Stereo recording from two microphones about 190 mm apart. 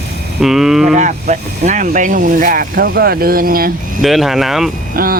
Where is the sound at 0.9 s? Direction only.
40° right (ahead or behind).